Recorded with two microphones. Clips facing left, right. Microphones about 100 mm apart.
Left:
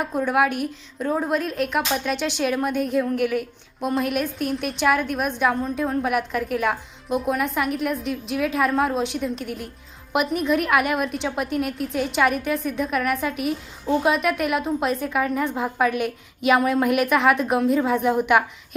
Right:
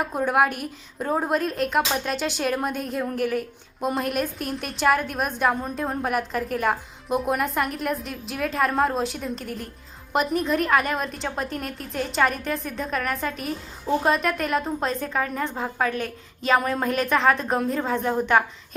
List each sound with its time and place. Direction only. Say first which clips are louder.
0.3 s a woman's voice: left 1 dB; centre (ahead or behind)
0.9 s a woman's voice: left 1 dB; 20° right (ahead or behind)
1.3 s a woman's voice: even; centre (ahead or behind)